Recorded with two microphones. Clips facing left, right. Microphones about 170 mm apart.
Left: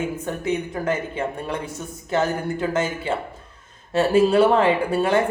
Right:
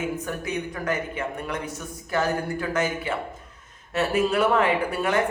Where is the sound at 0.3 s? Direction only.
25° left (ahead or behind).